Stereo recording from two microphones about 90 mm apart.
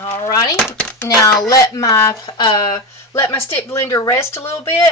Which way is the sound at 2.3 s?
55° left (ahead or behind).